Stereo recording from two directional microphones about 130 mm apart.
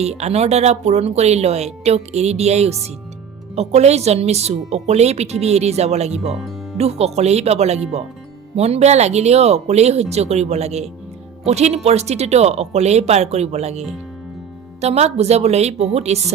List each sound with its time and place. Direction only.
0.0 s speech: 55° right (ahead or behind)